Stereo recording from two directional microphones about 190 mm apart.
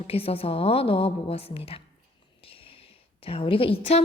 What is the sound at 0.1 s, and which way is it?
A woman's voice, 30° left (ahead or behind).